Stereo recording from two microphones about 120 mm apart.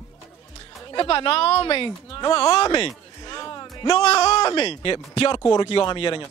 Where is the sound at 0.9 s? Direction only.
45° left (ahead or behind).